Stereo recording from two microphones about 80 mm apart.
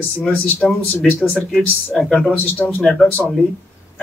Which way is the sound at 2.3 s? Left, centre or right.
Left.